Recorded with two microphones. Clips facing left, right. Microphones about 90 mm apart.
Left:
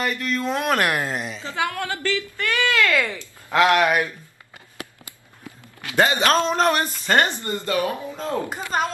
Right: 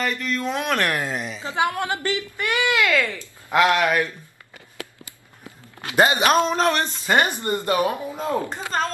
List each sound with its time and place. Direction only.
0.0 s speech: centre (ahead or behind)
1.4 s a woman's voice: 20° right (ahead or behind)
3.0 s speech: 15° left (ahead or behind)
5.9 s speech: 20° right (ahead or behind)
6.4 s speech: centre (ahead or behind)
7.1 s speech: 15° right (ahead or behind)
8.5 s speech: 15° left (ahead or behind)